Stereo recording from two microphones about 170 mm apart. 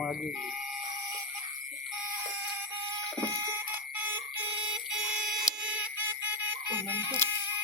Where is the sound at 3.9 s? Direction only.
10° right (ahead or behind).